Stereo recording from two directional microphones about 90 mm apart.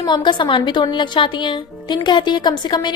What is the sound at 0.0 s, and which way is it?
A woman's voice, 60° left (ahead or behind).